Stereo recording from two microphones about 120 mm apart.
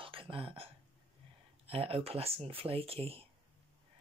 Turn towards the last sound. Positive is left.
turn(degrees=-50)  # may be behind; listen again after turning